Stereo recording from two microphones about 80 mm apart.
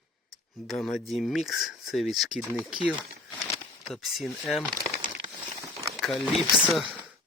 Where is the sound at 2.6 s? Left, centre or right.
Centre.